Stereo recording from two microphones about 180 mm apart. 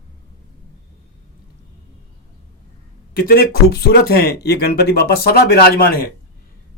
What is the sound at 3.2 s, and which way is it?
Speech, 60° left (ahead or behind).